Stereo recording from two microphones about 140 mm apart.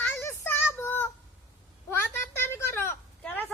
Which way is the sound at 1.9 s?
20° left (ahead or behind).